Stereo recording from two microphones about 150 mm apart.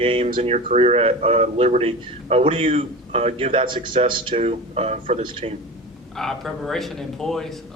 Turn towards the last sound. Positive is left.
turn(degrees=0)  # may be behind; listen again after turning